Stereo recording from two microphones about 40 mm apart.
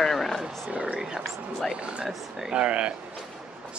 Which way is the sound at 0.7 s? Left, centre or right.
Right.